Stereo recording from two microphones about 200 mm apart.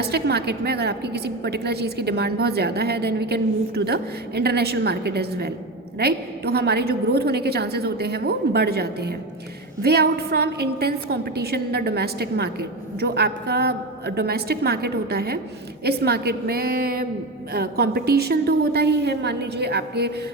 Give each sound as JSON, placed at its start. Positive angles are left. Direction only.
{"t": 0.0, "sound": "a woman's voice", "side_deg": -55}